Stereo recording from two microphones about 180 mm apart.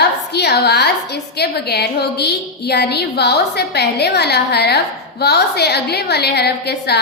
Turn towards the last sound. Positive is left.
turn(degrees=65)  # may be behind; listen again after turning